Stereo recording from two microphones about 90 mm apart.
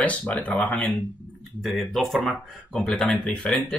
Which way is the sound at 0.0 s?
15° left (ahead or behind).